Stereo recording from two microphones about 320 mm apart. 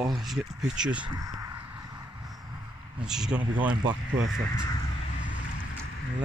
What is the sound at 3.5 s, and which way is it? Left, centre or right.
Speech, centre.